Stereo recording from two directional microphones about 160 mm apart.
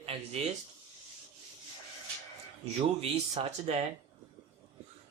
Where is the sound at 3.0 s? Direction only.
40° right (ahead or behind).